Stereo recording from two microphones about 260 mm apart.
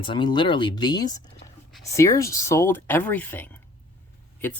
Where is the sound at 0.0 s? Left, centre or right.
Centre.